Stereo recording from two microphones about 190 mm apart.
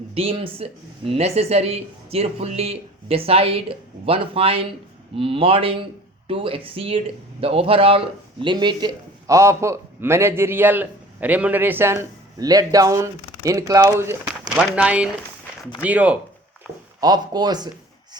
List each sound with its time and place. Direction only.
0.1 s a man's voice: 30° right (ahead or behind); by 16.1 s 5° right (ahead or behind)
17.0 s speech: 20° right (ahead or behind)